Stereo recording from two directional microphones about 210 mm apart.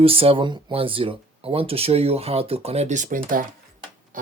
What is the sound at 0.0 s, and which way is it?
Speech, 25° right (ahead or behind).